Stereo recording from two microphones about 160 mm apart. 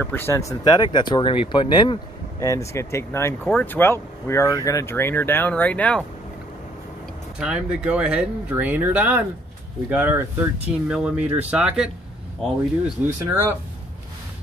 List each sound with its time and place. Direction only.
0.0 s speech: 15° left (ahead or behind); by 2.0 s 30° left (ahead or behind)
2.4 s speech: 20° left (ahead or behind)
7.3 s speech: 5° right (ahead or behind)